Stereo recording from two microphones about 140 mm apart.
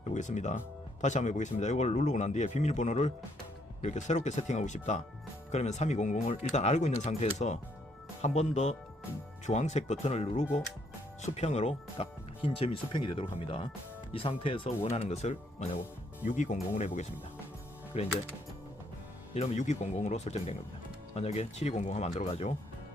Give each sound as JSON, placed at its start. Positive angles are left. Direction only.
{"t": 0.1, "sound": "speech", "side_deg": 60}
{"t": 14.8, "sound": "speech", "side_deg": 55}
{"t": 16.2, "sound": "speech", "side_deg": 65}
{"t": 19.3, "sound": "speech", "side_deg": 50}